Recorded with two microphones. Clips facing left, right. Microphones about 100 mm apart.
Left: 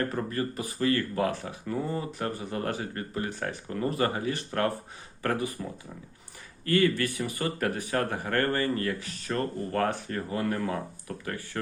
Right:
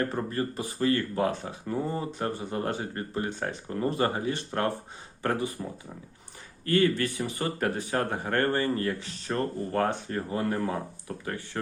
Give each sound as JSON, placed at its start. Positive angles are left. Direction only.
{"t": 0.1, "sound": "speech", "side_deg": -30}
{"t": 6.7, "sound": "speech", "side_deg": -30}